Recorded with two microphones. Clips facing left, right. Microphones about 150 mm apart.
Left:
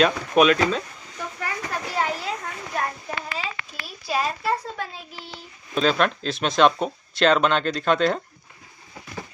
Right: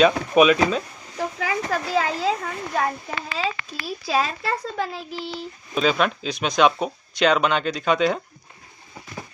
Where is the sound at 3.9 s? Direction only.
90° right.